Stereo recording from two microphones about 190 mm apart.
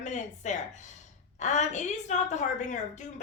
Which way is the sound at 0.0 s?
40° left (ahead or behind).